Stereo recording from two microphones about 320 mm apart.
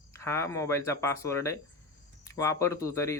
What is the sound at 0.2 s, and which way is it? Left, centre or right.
Speech, centre.